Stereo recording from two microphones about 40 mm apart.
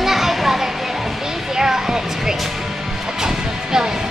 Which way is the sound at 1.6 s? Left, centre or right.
Centre.